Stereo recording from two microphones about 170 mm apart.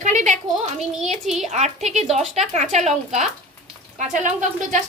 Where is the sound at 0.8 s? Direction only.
Centre (ahead or behind).